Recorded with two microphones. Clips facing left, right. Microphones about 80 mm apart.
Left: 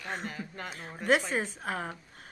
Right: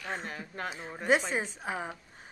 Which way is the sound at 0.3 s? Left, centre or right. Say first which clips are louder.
Right 1 dB; right.